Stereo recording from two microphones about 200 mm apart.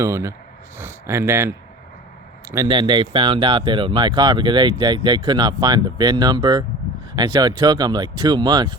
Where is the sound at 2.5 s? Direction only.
20° right (ahead or behind).